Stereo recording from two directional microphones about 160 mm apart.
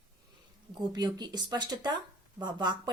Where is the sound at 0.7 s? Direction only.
25° right (ahead or behind).